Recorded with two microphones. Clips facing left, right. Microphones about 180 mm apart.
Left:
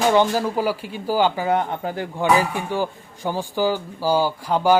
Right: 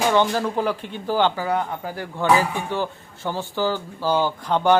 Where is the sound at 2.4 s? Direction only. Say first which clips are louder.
Left 1 dB; 10° left (ahead or behind).